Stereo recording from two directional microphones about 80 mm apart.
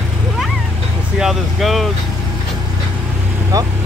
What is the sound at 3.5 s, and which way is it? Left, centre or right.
Speech, right.